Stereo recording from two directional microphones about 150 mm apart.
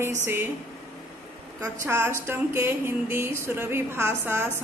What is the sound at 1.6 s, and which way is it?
Speech, 15° right (ahead or behind).